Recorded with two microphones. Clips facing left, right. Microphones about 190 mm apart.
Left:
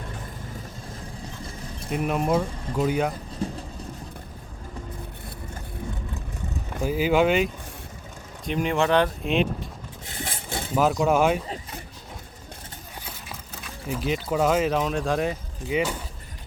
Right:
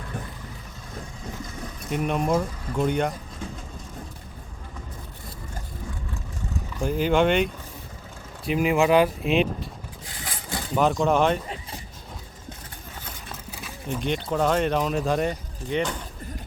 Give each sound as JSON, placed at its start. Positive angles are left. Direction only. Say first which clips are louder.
{"t": 1.9, "sound": "speech", "louder": "even", "side_deg": 0}
{"t": 3.4, "sound": "speech", "louder": "left 7 dB", "side_deg": 35}
{"t": 6.8, "sound": "speech", "louder": "even", "side_deg": 5}
{"t": 10.1, "sound": "a sound", "louder": "left 1 dB", "side_deg": 25}
{"t": 10.9, "sound": "speech", "louder": "left 1 dB", "side_deg": 10}
{"t": 13.1, "sound": "vehicle", "louder": "right 1 dB", "side_deg": 5}
{"t": 13.7, "sound": "speech", "louder": "even", "side_deg": 5}